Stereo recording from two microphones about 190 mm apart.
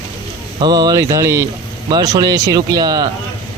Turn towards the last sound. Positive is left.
turn(degrees=-20)  # may be behind; listen again after turning